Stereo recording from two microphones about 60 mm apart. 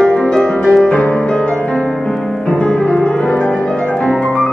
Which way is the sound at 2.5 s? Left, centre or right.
Centre.